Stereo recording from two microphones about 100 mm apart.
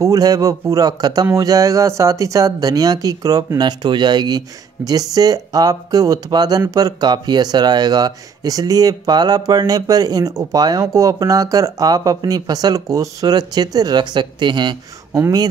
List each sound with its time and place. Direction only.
0.0 s speech: 35° right (ahead or behind)
15.1 s speech: 30° right (ahead or behind)